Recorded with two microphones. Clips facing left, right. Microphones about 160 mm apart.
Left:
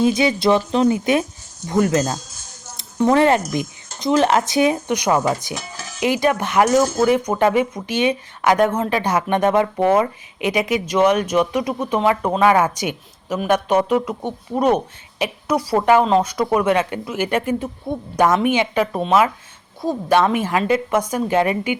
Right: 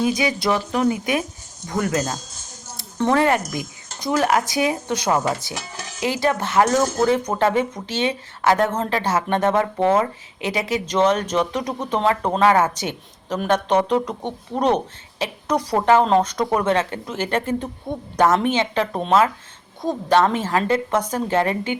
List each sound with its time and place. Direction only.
0.0 s a woman's voice: 25° left (ahead or behind)